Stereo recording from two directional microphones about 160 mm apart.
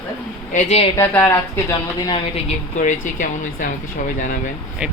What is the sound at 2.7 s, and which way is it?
Speech, 55° left (ahead or behind).